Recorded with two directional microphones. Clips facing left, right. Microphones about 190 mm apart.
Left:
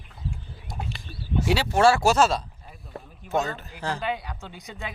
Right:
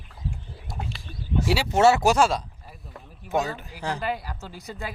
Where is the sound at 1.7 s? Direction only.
20° right (ahead or behind).